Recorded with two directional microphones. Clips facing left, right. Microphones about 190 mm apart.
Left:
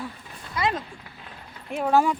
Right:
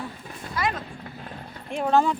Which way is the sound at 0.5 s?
25° left (ahead or behind).